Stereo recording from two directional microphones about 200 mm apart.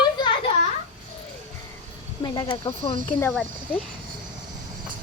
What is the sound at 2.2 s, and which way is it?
Speech, 20° left (ahead or behind).